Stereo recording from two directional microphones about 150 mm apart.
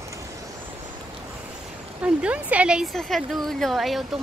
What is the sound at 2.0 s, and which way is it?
A woman's voice, 10° right (ahead or behind).